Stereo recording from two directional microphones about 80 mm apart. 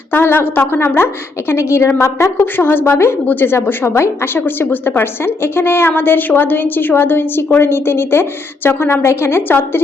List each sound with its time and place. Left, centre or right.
0.1 s a woman's voice: left